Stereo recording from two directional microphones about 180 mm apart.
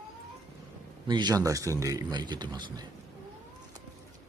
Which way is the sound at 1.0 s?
25° right (ahead or behind).